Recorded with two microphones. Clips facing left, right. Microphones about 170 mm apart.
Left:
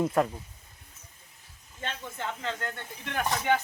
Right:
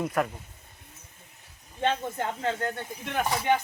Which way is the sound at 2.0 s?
50° right (ahead or behind).